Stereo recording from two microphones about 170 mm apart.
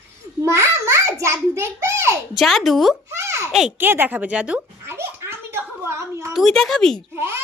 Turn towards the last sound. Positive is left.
turn(degrees=-15)  # may be behind; listen again after turning